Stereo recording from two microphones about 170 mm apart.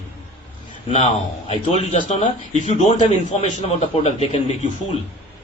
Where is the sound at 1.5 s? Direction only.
40° left (ahead or behind).